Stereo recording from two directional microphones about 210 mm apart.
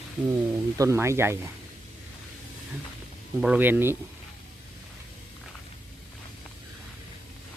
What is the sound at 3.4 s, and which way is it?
Speech, 5° right (ahead or behind).